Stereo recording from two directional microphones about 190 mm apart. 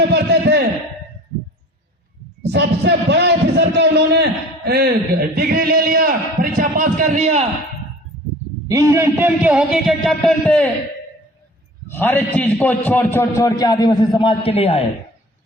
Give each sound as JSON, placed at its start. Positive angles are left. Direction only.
{"t": 0.1, "sound": "a man's voice", "side_deg": -60}
{"t": 2.4, "sound": "a man's voice", "side_deg": -65}
{"t": 8.7, "sound": "a man's voice", "side_deg": -15}
{"t": 11.9, "sound": "a man's voice", "side_deg": 10}